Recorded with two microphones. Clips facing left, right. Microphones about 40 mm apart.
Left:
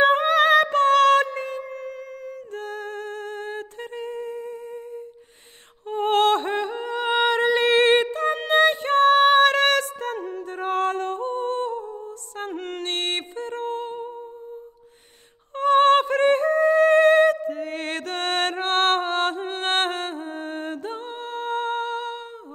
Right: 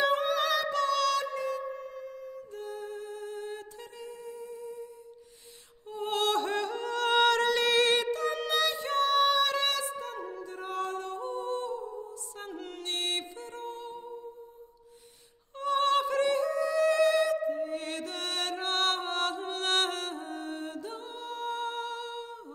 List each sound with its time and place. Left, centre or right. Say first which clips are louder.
0.0 s singing: left 9 dB; left
0.3 s music: left 11 dB; left
2.5 s humming: left 7 dB; left
5.9 s music: left 10 dB; left
15.5 s music: left 10 dB; left
17.6 s music: left 5 dB; left